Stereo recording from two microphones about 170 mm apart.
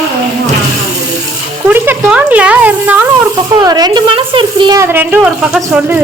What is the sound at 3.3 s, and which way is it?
Speech, 25° right (ahead or behind).